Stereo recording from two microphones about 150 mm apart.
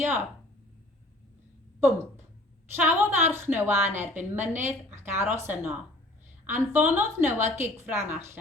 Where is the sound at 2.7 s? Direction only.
15° right (ahead or behind).